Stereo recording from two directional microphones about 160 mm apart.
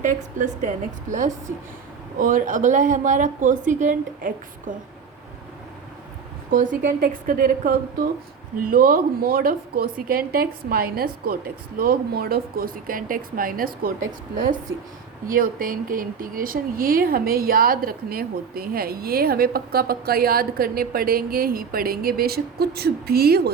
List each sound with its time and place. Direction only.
0.0 s a woman's voice: 50° right (ahead or behind)
2.1 s a woman's voice: 55° right (ahead or behind)
6.5 s a woman's voice: 55° right (ahead or behind); by 23.5 s 75° right (ahead or behind)